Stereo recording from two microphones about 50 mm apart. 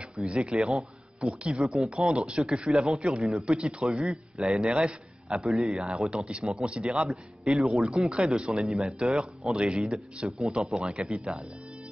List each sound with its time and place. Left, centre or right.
0.0 s a sound: right
0.4 s a man's voice: centre
3.4 s a man's voice: centre
3.8 s a man's voice: centre
5.3 s a man's voice: centre
5.9 s speech: centre
8.1 s a man's voice: centre
10.2 s a man's voice: centre
10.6 s speech: centre